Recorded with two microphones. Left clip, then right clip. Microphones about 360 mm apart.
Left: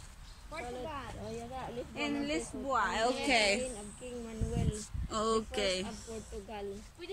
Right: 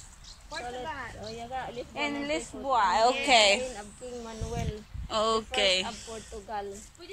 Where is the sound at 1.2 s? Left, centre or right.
Right.